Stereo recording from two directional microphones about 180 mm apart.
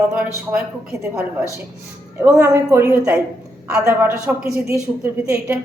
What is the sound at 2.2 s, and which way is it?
A woman's voice, 15° right (ahead or behind).